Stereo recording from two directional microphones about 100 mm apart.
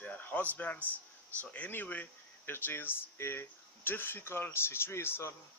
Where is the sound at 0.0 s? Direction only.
15° left (ahead or behind).